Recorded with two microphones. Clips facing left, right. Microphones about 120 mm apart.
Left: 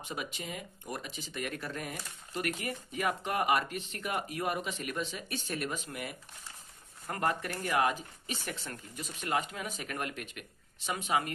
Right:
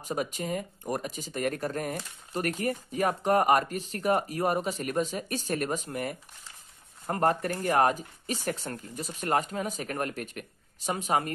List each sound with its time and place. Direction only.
0.0 s speech: 40° right (ahead or behind)